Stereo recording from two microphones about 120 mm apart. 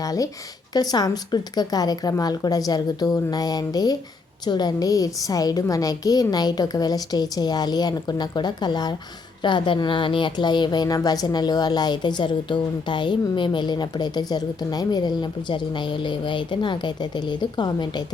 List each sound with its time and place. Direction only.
0.0 s a woman's voice: 30° left (ahead or behind)